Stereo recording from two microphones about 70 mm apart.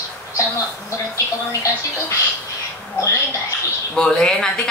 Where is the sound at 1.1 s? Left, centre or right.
Left.